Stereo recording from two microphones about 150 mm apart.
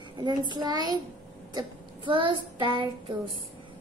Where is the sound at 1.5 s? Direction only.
35° right (ahead or behind).